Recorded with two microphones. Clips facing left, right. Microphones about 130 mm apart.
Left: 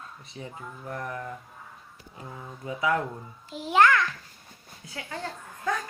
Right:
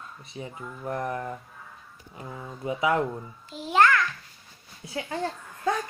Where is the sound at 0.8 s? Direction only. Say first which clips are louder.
Right 5 dB; 30° right (ahead or behind).